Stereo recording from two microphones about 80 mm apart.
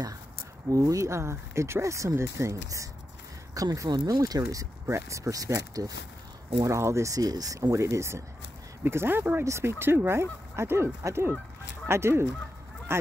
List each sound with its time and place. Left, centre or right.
0.7 s speech: right
9.4 s speech: right